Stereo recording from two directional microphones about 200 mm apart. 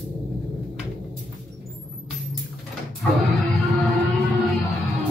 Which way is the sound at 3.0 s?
Centre (ahead or behind).